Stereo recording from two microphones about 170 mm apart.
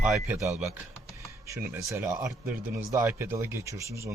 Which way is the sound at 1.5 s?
20° right (ahead or behind).